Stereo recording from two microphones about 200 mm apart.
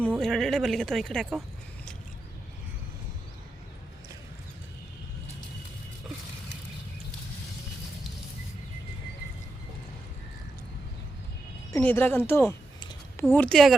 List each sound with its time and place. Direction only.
0.2 s speech: centre (ahead or behind)
11.7 s speech: 10° left (ahead or behind)
12.5 s a sound: 20° left (ahead or behind)
13.2 s speech: 10° left (ahead or behind)